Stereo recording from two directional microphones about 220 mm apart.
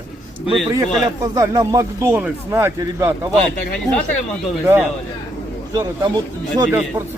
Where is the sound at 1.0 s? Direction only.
15° right (ahead or behind).